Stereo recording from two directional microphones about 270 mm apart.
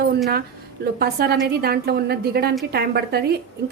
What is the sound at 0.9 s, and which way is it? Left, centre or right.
Speech, right.